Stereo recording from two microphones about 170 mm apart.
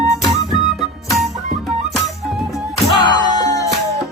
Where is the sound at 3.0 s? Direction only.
25° left (ahead or behind).